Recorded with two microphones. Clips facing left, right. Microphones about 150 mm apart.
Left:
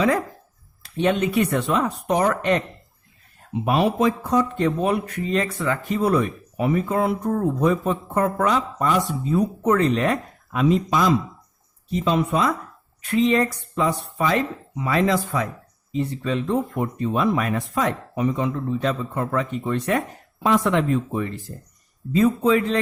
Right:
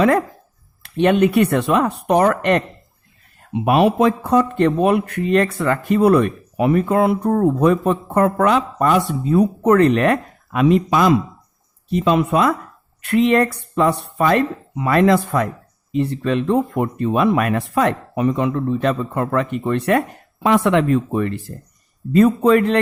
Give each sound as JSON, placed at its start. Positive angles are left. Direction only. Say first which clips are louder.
{"t": 0.8, "sound": "speech", "louder": "right 6 dB", "side_deg": -65}